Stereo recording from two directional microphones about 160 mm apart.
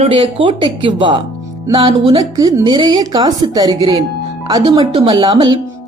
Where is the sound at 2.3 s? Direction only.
25° right (ahead or behind).